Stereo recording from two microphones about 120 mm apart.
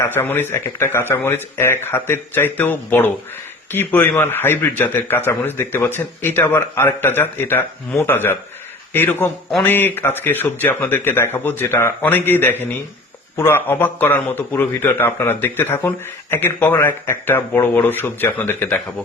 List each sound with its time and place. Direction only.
0.0 s a man's voice: 20° left (ahead or behind)